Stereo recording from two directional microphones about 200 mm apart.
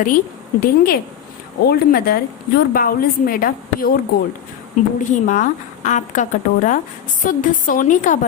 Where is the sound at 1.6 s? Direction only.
50° left (ahead or behind).